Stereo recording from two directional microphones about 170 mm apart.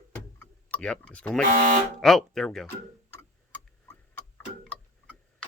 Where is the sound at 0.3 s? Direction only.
5° left (ahead or behind).